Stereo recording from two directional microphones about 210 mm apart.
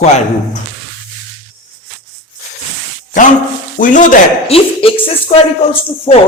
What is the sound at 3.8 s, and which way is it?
A man's voice, 35° left (ahead or behind).